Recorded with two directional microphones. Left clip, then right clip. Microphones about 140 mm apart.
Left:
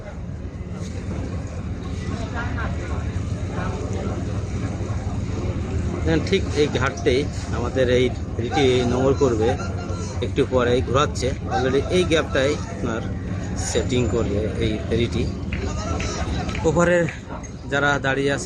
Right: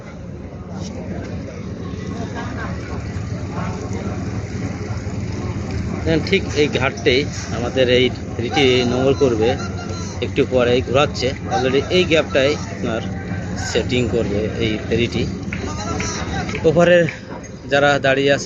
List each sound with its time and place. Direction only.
6.1 s speech: 20° left (ahead or behind)
16.6 s speech: 15° left (ahead or behind)